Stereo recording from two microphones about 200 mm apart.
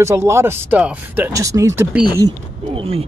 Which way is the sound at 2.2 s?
25° right (ahead or behind).